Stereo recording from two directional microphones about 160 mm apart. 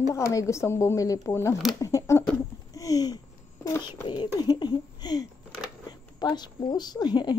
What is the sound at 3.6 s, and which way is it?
A woman's voice, 20° left (ahead or behind).